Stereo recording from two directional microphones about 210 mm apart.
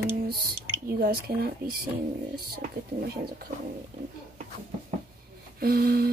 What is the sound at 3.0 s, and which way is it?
Speech, 45° right (ahead or behind).